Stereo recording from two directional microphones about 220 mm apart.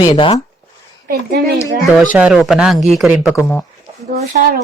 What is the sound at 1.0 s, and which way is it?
Speech, 50° right (ahead or behind).